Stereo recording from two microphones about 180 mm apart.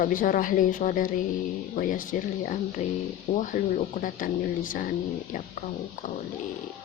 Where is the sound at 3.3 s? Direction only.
45° left (ahead or behind).